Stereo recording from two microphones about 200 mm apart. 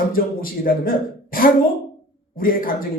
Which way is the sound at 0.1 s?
45° left (ahead or behind).